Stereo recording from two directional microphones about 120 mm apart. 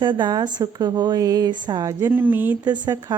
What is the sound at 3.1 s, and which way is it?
Speech, 30° right (ahead or behind).